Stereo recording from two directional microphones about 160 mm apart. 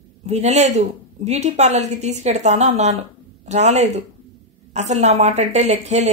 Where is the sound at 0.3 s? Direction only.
45° right (ahead or behind).